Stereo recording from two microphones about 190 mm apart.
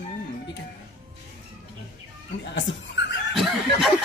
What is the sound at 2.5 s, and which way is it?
Speech, 70° left (ahead or behind).